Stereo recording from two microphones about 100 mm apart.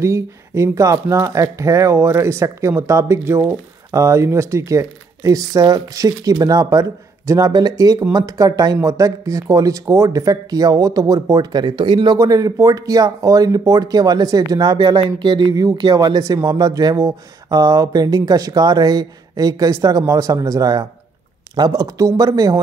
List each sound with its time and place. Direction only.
0.0 s speech: 30° right (ahead or behind); by 12.2 s 50° right (ahead or behind)
12.2 s speech: 35° right (ahead or behind); by 15.4 s 50° right (ahead or behind)
15.5 s speech: 40° right (ahead or behind)